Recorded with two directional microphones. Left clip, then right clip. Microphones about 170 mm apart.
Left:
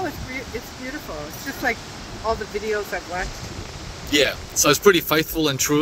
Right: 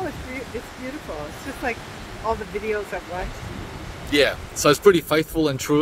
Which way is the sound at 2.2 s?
45° left (ahead or behind).